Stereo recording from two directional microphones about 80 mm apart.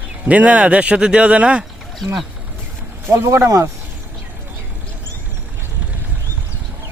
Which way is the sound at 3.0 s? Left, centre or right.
Right.